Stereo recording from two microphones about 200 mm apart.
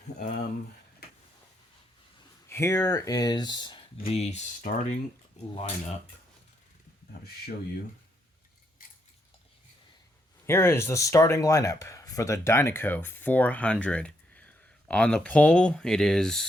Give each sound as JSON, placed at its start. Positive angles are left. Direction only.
{"t": 2.5, "sound": "speech", "side_deg": 15}
{"t": 10.4, "sound": "speech", "side_deg": 10}